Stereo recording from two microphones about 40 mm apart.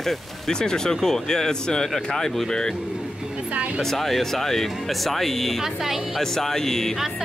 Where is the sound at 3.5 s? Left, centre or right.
Right.